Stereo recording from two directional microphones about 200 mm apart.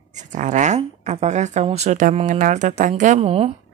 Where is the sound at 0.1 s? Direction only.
35° right (ahead or behind).